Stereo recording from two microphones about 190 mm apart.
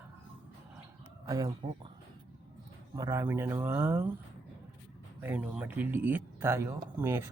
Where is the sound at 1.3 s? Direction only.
20° right (ahead or behind).